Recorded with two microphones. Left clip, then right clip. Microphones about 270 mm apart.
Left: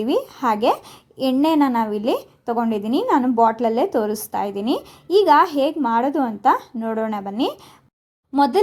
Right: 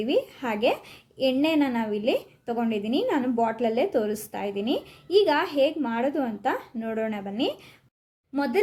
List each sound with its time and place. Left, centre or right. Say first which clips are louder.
0.0 s a woman's voice: left 5 dB; left